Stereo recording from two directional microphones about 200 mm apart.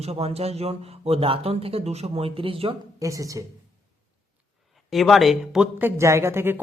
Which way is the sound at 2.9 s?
15° right (ahead or behind).